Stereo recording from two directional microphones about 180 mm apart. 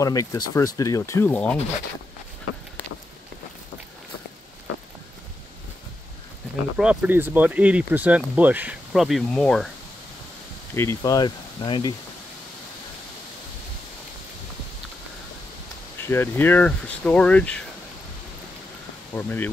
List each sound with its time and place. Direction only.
0.0 s speech: 20° left (ahead or behind)
6.8 s speech: 5° right (ahead or behind)
10.7 s speech: 15° left (ahead or behind)
16.0 s speech: 15° left (ahead or behind)
19.1 s speech: 10° left (ahead or behind)